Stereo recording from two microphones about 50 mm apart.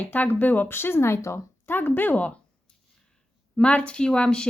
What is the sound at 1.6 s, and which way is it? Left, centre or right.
Speech, left.